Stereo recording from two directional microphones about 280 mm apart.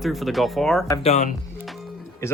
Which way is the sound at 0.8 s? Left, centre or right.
Centre.